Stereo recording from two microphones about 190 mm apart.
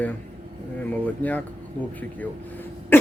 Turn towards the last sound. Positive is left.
turn(degrees=10)  # may be behind; listen again after turning